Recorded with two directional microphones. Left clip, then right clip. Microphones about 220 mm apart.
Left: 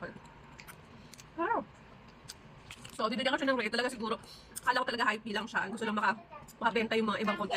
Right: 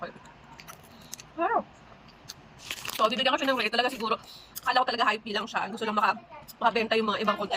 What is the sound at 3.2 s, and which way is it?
A woman's voice, 20° left (ahead or behind).